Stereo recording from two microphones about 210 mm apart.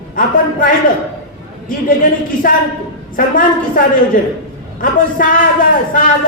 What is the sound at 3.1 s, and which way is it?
Speech, 40° left (ahead or behind).